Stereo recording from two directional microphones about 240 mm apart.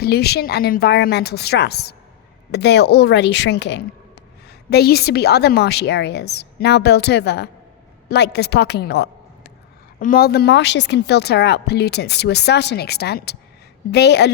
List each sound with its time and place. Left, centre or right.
0.0 s a woman's voice: left